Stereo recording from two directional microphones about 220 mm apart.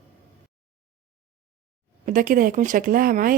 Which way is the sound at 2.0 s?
40° right (ahead or behind).